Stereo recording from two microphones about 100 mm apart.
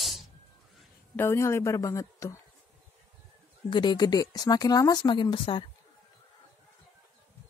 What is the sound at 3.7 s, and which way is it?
Speech, 50° left (ahead or behind).